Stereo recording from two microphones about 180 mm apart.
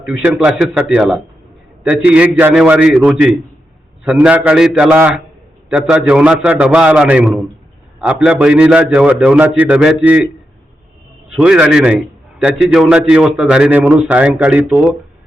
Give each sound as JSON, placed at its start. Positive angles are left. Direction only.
{"t": 0.0, "sound": "a man's voice", "side_deg": -5}
{"t": 11.3, "sound": "a man's voice", "side_deg": -5}